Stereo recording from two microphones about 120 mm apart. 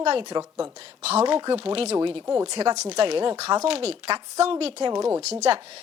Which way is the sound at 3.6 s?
55° right (ahead or behind).